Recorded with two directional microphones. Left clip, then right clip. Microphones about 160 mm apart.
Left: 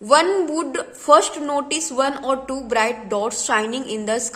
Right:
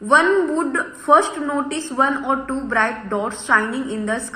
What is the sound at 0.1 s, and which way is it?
A woman's voice, 65° left (ahead or behind).